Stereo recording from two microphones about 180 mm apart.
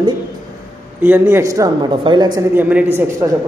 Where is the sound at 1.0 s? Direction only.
10° right (ahead or behind).